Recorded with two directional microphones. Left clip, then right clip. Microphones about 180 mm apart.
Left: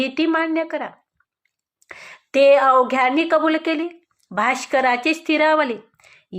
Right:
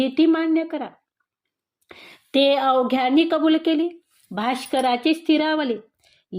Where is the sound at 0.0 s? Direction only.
45° right (ahead or behind).